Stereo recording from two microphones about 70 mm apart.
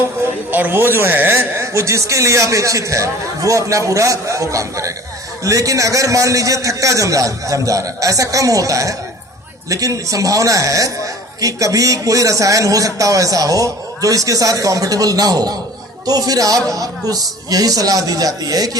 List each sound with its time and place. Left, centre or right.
0.5 s a man's voice: right